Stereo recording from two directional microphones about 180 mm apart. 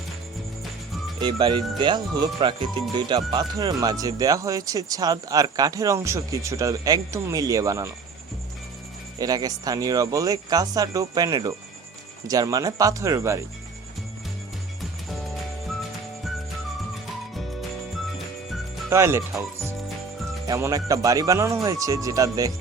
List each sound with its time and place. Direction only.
1.2 s speech: 25° right (ahead or behind)
9.1 s speech: 20° right (ahead or behind)
18.9 s speech: 15° right (ahead or behind)
20.5 s speech: 20° right (ahead or behind)